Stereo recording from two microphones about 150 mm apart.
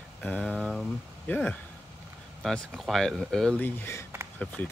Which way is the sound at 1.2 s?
10° left (ahead or behind).